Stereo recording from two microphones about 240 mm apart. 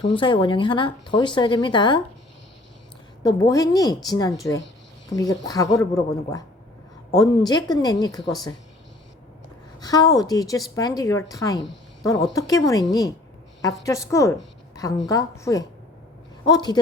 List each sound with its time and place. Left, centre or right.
0.0 s speech: centre
3.2 s a woman's voice: centre
9.8 s a woman's voice: centre